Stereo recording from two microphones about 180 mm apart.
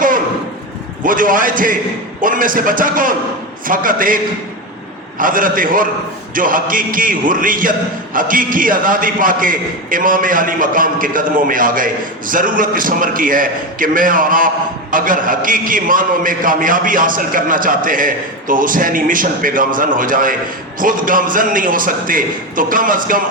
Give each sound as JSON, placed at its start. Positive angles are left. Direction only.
{"t": 1.0, "sound": "a man's voice", "side_deg": -50}
{"t": 5.2, "sound": "a man's voice", "side_deg": -50}